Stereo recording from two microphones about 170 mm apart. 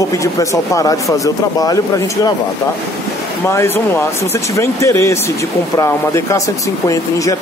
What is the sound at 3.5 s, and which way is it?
Speech, 15° left (ahead or behind).